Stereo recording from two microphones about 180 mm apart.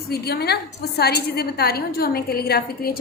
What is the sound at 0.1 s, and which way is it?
A woman's voice, 65° left (ahead or behind).